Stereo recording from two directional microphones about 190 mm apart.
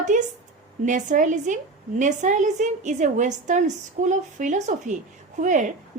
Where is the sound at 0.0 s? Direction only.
40° right (ahead or behind).